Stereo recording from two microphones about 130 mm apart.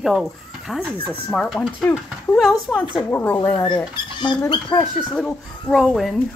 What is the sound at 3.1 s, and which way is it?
Speech, 15° left (ahead or behind).